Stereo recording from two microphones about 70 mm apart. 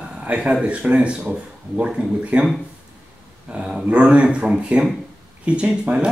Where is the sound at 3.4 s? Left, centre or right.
Centre.